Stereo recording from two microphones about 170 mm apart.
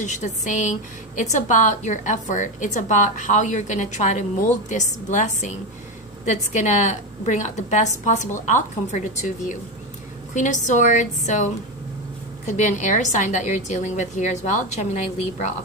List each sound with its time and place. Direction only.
0.0 s a woman's voice: 45° left (ahead or behind)
12.4 s a woman's voice: 45° left (ahead or behind)